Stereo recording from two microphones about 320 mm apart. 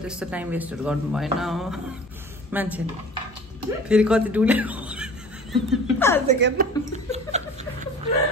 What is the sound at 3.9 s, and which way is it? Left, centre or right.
Speech, centre.